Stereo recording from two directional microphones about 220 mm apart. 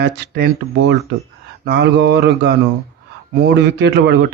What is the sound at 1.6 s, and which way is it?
Speech, 50° right (ahead or behind).